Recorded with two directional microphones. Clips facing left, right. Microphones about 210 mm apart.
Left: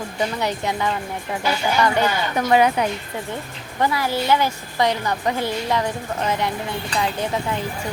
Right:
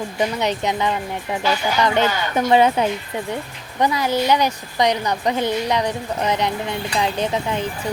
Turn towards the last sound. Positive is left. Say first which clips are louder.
# right 2 dB
turn(degrees=-20)  # may be behind; listen again after turning